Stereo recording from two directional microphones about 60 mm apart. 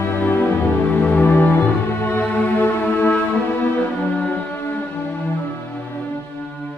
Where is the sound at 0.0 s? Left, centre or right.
Left.